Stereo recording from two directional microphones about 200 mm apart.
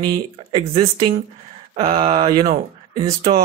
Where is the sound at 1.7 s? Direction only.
30° right (ahead or behind).